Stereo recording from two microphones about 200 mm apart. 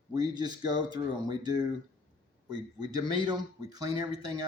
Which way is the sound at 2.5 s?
20° right (ahead or behind).